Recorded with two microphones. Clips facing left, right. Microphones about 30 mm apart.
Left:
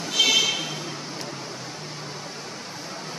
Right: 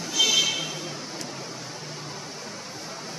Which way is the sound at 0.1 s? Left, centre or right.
Left.